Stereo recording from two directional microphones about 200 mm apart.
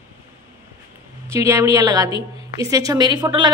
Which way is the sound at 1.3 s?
15° right (ahead or behind).